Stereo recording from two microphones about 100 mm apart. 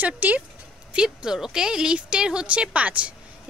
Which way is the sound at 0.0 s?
15° right (ahead or behind).